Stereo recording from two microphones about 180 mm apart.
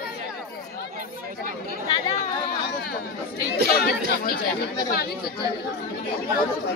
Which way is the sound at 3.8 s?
55° left (ahead or behind).